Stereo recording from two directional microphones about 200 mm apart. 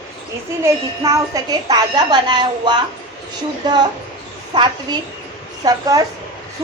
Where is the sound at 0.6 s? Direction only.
15° right (ahead or behind).